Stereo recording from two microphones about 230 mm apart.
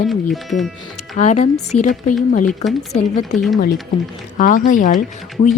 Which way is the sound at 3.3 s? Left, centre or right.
Centre.